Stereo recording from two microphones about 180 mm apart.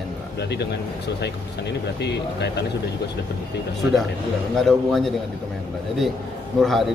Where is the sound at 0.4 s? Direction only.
70° left (ahead or behind).